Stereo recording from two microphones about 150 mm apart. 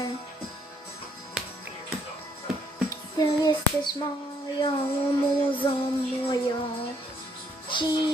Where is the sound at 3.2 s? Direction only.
25° left (ahead or behind).